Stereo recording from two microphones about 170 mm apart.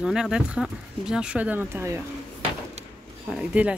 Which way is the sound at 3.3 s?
5° right (ahead or behind).